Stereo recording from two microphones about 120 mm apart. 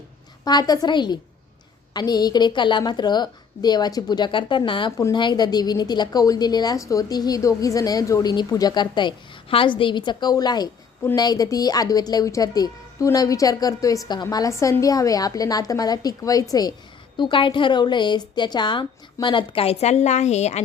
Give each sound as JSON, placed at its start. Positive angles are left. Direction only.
{"t": 0.4, "sound": "a woman's voice", "side_deg": 35}
{"t": 4.9, "sound": "a woman's voice", "side_deg": 25}
{"t": 5.1, "sound": "a woman's voice", "side_deg": 40}